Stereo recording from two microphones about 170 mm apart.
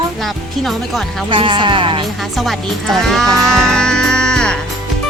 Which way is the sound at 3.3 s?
20° right (ahead or behind).